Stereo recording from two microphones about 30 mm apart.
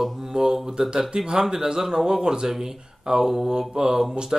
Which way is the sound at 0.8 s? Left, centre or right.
Right.